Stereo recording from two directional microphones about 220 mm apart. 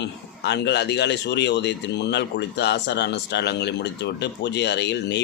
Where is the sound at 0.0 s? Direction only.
50° left (ahead or behind).